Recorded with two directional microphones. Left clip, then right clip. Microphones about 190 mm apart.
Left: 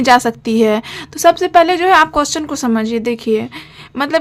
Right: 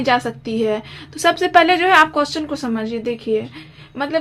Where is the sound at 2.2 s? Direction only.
40° left (ahead or behind).